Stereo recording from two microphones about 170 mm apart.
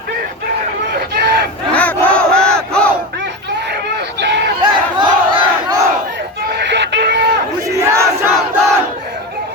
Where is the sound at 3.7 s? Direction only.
85° right.